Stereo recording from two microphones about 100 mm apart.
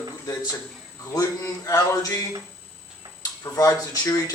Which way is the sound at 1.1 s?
35° left (ahead or behind).